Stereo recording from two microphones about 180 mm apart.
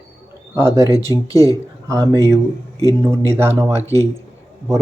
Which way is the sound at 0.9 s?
20° left (ahead or behind).